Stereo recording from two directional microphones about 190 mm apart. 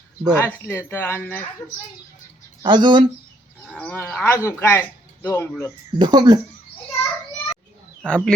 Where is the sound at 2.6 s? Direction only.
25° right (ahead or behind).